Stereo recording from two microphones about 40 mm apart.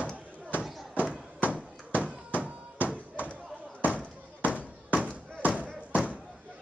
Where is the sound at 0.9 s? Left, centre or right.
Right.